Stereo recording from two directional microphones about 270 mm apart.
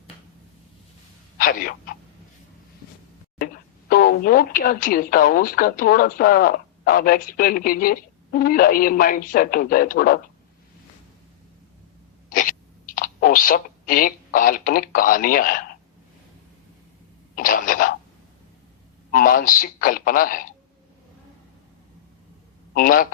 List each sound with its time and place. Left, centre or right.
1.4 s speech: left
3.3 s speech: left
12.3 s a sound: left
17.3 s a sound: left
19.1 s speech: left
22.7 s speech: left